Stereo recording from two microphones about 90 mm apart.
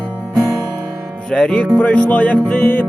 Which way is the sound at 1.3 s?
10° left (ahead or behind).